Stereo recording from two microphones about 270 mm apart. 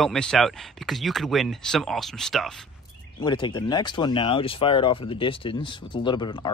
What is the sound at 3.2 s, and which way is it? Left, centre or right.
Speech, centre.